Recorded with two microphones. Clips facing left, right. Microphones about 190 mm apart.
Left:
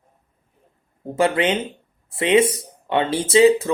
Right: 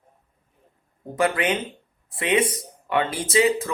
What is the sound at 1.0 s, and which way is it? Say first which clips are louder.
Speech: left 4 dB; 25° left (ahead or behind).